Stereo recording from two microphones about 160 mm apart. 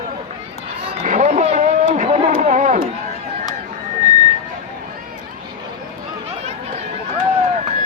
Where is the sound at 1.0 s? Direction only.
45° right (ahead or behind).